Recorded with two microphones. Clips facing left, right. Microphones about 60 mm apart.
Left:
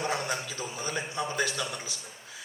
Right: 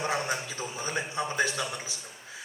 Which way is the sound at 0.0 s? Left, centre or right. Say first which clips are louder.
Right 1 dB; right.